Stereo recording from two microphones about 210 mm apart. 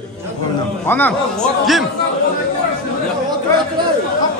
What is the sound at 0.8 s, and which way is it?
Speech, 10° left (ahead or behind).